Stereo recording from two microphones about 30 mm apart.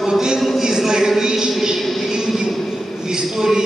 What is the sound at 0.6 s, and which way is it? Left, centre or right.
Speech, centre.